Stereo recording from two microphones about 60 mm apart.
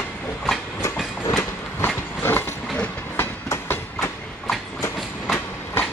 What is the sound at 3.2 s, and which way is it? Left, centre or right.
Train, left.